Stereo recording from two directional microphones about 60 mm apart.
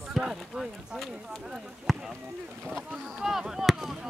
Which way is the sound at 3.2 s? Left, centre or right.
Centre.